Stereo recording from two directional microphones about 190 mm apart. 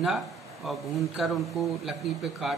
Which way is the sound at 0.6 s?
Centre (ahead or behind).